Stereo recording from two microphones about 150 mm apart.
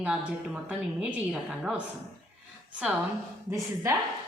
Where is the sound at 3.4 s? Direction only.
20° right (ahead or behind).